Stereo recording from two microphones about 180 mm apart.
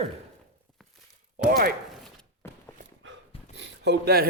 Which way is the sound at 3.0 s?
85° right.